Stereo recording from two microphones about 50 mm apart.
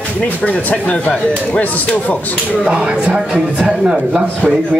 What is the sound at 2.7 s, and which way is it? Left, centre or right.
Speech, right.